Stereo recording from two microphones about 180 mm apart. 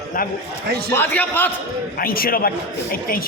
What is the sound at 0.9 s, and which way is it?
Speech, 10° left (ahead or behind).